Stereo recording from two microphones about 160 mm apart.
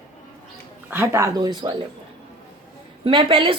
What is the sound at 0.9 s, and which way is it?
Speech, 15° right (ahead or behind).